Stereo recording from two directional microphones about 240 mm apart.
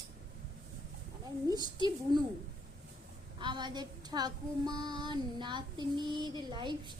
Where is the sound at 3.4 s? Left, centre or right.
Centre.